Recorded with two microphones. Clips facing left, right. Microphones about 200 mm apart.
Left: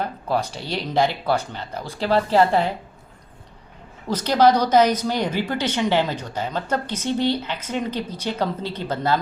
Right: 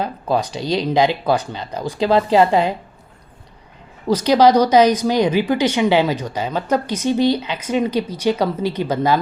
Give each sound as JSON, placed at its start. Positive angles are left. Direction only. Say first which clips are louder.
{"t": 0.0, "sound": "a woman's voice", "louder": "right 4 dB", "side_deg": -15}
{"t": 4.1, "sound": "a woman's voice", "louder": "right 4 dB", "side_deg": -10}